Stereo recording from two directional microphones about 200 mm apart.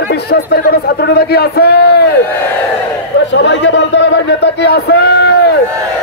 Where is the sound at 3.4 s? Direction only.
65° left (ahead or behind).